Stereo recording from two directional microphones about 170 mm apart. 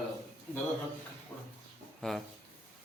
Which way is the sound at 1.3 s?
10° left (ahead or behind).